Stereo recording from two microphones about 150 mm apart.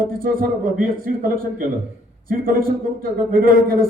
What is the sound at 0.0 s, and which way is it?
A man's voice, 70° right (ahead or behind).